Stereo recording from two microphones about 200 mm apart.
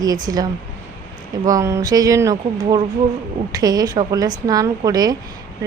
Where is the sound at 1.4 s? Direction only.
15° right (ahead or behind).